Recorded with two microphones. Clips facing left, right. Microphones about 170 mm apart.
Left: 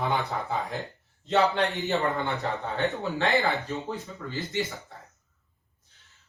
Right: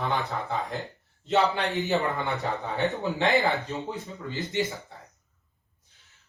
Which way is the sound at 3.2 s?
20° right (ahead or behind).